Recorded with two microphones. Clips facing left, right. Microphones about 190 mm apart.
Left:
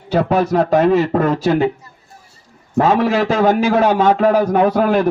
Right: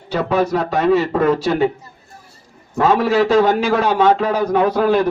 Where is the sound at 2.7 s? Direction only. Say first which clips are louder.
Even; 45° left (ahead or behind).